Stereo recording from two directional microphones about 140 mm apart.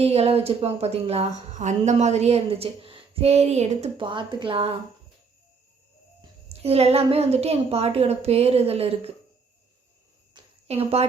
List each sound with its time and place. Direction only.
0.0 s speech: 45° right (ahead or behind)
3.9 s speech: 35° right (ahead or behind)
6.5 s speech: 45° right (ahead or behind)
10.4 s cricket: 35° right (ahead or behind)
10.7 s speech: 45° right (ahead or behind)